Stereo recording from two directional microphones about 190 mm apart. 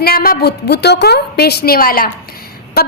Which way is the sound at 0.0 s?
50° left (ahead or behind).